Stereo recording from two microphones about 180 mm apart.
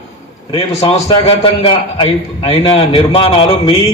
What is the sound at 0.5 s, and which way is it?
A man's voice, 35° left (ahead or behind).